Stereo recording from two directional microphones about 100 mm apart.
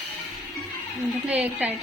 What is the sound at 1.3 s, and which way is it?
Speech, 15° right (ahead or behind).